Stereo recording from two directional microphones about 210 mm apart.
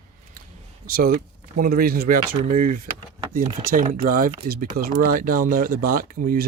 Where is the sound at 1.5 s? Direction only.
45° right (ahead or behind).